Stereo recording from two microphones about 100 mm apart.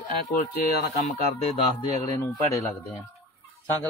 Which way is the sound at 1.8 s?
35° left (ahead or behind).